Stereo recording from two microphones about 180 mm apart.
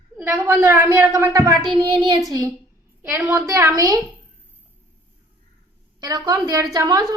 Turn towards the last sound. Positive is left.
turn(degrees=-20)  # may be behind; listen again after turning